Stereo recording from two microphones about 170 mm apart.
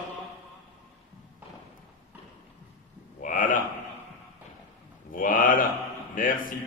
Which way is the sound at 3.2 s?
50° left (ahead or behind).